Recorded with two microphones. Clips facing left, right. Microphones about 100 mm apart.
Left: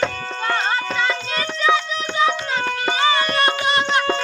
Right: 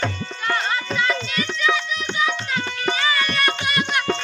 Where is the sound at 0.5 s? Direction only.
30° left (ahead or behind).